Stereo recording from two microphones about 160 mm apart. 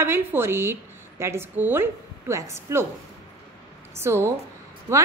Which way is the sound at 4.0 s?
15° right (ahead or behind).